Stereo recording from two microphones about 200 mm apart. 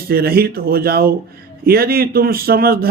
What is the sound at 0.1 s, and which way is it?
Speech, 50° right (ahead or behind).